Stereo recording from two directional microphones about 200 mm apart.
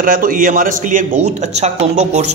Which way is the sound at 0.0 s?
45° right (ahead or behind).